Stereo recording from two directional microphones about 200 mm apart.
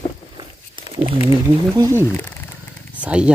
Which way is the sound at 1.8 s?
15° right (ahead or behind).